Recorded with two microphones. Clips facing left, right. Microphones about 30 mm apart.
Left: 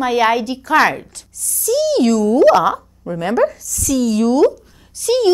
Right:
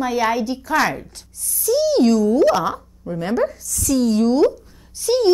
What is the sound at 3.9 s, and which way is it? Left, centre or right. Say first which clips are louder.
Speech: left 2 dB; left.